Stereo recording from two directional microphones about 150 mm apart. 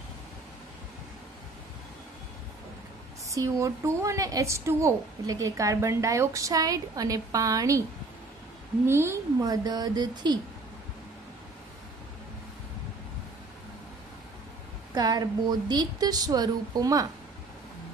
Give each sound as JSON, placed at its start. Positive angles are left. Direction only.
{"t": 3.3, "sound": "a woman's voice", "side_deg": -20}
{"t": 8.8, "sound": "a woman's voice", "side_deg": -15}
{"t": 15.0, "sound": "a woman's voice", "side_deg": -25}